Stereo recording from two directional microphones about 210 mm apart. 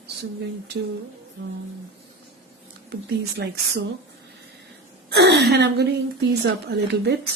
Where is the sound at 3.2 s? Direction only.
50° right (ahead or behind).